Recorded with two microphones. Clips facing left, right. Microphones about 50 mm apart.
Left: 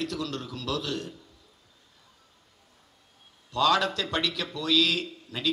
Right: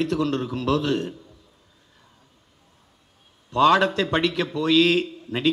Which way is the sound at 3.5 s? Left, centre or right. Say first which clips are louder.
Right 6 dB; right.